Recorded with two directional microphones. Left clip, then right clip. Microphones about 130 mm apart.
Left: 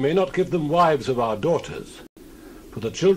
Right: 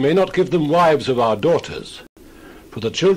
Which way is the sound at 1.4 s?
40° right (ahead or behind).